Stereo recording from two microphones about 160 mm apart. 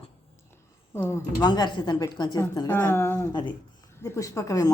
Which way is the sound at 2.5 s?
15° left (ahead or behind).